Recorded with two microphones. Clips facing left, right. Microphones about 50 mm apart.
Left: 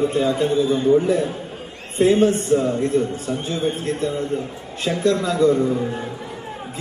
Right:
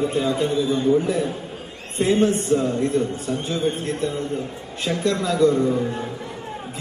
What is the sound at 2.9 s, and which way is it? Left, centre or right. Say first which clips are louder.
Speech: left 3 dB; centre.